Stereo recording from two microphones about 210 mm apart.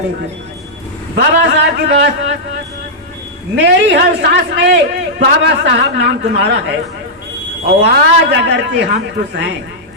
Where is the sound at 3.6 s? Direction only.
55° right (ahead or behind).